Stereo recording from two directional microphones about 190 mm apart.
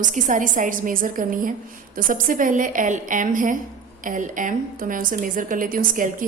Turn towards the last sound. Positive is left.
turn(degrees=-45)  # may be behind; listen again after turning